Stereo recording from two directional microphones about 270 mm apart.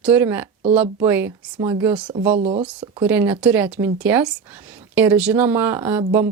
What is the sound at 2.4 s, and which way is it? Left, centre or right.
Speech, right.